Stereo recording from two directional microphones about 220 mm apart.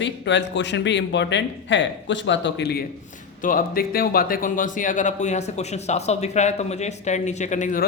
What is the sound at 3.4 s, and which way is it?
Speech, 40° left (ahead or behind).